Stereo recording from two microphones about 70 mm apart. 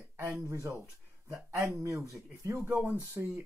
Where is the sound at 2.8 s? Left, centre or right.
Right.